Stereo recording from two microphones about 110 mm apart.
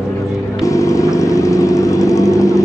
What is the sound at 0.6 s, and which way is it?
Vehicle, 30° left (ahead or behind).